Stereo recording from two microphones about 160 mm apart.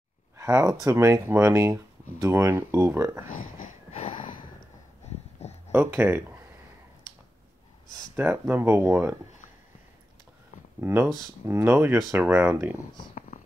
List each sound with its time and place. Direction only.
0.4 s speech: 20° right (ahead or behind)
3.9 s a sound: 35° left (ahead or behind)
5.7 s speech: 15° right (ahead or behind)
8.2 s speech: 15° right (ahead or behind)
10.8 s speech: 15° right (ahead or behind)